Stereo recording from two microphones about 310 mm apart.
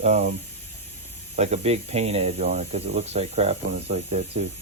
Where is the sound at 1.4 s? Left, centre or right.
Right.